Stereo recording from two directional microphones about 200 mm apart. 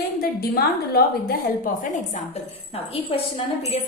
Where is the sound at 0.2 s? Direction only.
50° left (ahead or behind).